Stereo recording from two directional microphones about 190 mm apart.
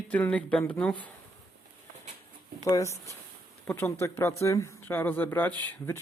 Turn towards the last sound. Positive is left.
turn(degrees=10)  # may be behind; listen again after turning